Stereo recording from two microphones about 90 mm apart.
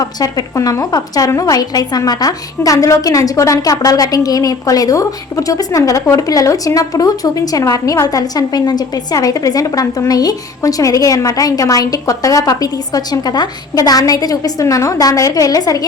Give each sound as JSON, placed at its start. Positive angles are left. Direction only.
{"t": 0.0, "sound": "a woman's voice", "side_deg": 45}